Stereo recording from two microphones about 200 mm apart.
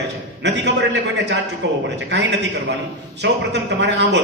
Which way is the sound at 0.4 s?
60° right (ahead or behind).